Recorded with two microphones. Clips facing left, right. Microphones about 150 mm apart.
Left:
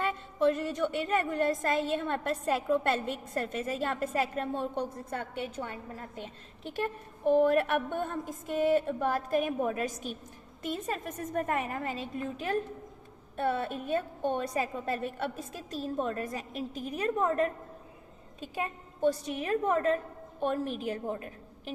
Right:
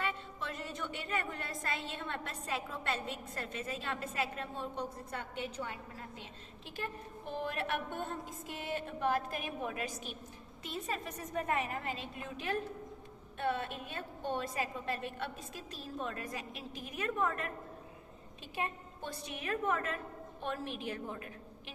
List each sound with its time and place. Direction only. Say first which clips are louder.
0.0 s a woman's voice: left 12 dB; 50° left (ahead or behind)
19.0 s a woman's voice: left 12 dB; 40° left (ahead or behind)